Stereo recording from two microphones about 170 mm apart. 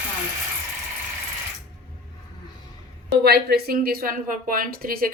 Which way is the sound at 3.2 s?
65° right (ahead or behind).